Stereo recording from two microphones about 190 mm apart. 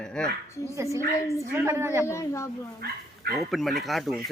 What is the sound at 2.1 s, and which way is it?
Speech, 15° left (ahead or behind).